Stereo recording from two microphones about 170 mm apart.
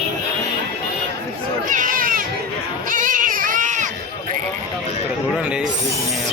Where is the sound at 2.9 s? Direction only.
55° right (ahead or behind).